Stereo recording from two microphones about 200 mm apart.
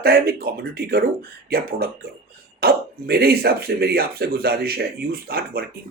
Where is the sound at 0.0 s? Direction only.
50° right (ahead or behind).